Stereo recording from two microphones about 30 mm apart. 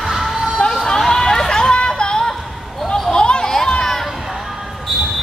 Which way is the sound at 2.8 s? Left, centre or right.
Centre.